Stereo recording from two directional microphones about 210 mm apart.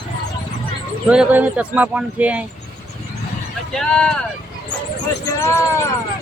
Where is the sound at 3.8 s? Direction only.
5° left (ahead or behind).